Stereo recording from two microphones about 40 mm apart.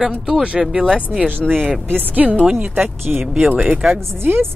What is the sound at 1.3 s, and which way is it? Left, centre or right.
Speech, right.